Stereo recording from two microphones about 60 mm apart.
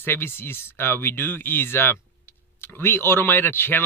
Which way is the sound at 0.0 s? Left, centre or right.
Left.